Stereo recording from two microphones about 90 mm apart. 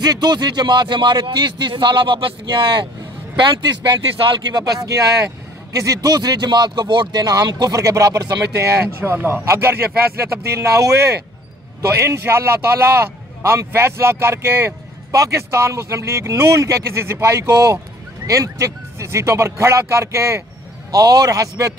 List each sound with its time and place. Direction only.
0.0 s speech: 50° right (ahead or behind)
5.7 s speech: 40° right (ahead or behind)
8.8 s speech: 25° right (ahead or behind)
11.9 s a man's voice: 30° right (ahead or behind)
20.9 s speech: 45° right (ahead or behind)